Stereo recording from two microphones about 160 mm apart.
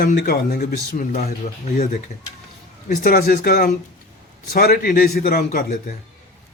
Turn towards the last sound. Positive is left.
turn(degrees=65)  # may be behind; listen again after turning